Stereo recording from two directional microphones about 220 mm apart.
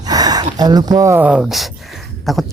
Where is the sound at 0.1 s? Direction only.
15° right (ahead or behind).